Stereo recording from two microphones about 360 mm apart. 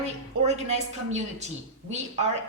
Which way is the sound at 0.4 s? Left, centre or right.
Centre.